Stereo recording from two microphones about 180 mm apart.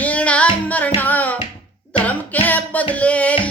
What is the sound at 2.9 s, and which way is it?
Speech, 5° left (ahead or behind).